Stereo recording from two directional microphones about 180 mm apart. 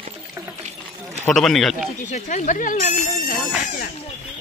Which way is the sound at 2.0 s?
40° left (ahead or behind).